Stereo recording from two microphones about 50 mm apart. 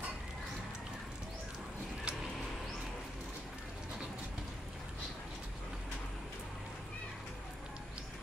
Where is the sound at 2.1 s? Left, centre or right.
Right.